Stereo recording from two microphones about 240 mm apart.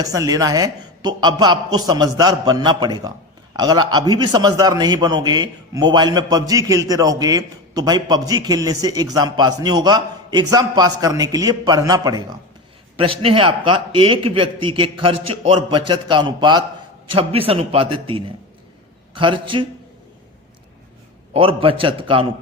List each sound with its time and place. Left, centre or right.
0.0 s a man's voice: centre
21.3 s a man's voice: right